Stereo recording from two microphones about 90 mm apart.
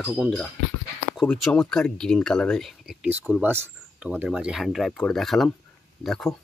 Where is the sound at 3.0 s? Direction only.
15° right (ahead or behind).